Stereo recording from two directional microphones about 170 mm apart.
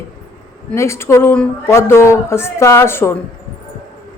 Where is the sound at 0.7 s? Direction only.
15° left (ahead or behind).